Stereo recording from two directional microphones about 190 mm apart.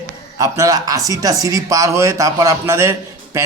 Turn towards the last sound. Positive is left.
turn(degrees=-15)  # may be behind; listen again after turning